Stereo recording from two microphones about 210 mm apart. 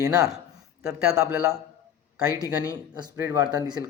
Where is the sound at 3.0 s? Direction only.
15° right (ahead or behind).